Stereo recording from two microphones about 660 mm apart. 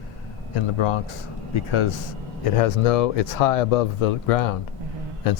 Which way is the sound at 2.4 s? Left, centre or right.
Left.